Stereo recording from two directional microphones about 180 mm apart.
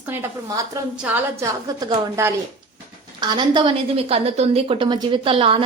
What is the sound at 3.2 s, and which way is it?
A woman's voice, 25° right (ahead or behind).